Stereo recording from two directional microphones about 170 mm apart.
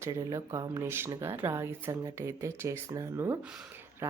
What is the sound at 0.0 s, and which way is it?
Speech, 20° right (ahead or behind).